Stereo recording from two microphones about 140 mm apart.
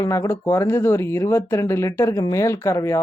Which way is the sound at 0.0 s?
20° left (ahead or behind).